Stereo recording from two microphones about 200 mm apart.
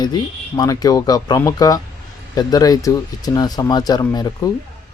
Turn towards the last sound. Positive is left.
turn(degrees=20)  # may be behind; listen again after turning